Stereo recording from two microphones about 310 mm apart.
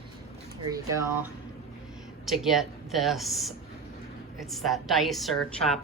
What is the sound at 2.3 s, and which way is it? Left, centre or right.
Speech, centre.